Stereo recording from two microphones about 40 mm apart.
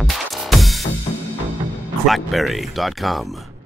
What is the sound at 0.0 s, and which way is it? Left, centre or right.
Music, centre.